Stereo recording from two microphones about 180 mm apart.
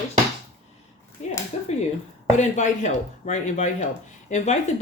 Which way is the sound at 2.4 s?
40° left (ahead or behind).